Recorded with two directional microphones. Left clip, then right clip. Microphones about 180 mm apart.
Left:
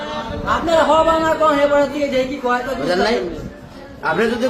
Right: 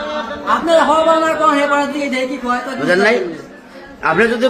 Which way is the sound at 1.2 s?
90° right.